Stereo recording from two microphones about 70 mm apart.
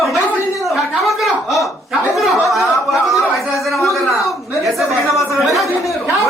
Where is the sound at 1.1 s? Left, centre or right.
Centre.